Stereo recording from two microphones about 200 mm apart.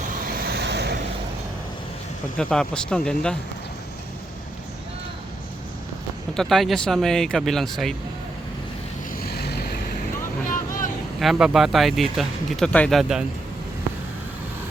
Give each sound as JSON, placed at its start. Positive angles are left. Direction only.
{"t": 0.3, "sound": "a sound", "side_deg": -50}
{"t": 2.4, "sound": "speech", "side_deg": 5}
{"t": 6.3, "sound": "speech", "side_deg": 0}
{"t": 9.3, "sound": "vehicle", "side_deg": 55}
{"t": 11.2, "sound": "speech", "side_deg": 0}